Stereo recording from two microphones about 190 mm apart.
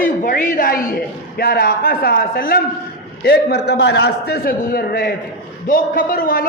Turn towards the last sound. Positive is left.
turn(degrees=50)  # may be behind; listen again after turning